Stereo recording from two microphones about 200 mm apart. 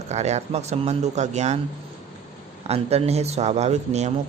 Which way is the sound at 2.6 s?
30° right (ahead or behind).